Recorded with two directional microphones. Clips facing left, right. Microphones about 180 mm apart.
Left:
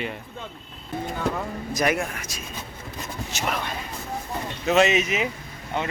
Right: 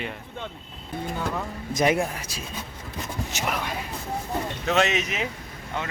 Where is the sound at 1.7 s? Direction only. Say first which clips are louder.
Right 2 dB; 25° right (ahead or behind).